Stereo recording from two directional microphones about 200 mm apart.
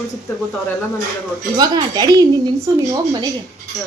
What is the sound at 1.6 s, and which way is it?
A woman's voice, 20° right (ahead or behind).